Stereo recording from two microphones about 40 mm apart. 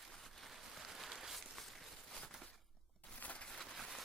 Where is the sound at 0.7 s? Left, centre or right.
Centre.